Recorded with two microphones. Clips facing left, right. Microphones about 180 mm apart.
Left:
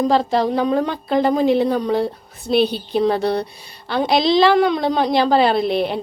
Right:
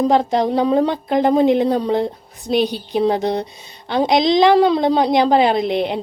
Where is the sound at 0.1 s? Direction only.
20° right (ahead or behind).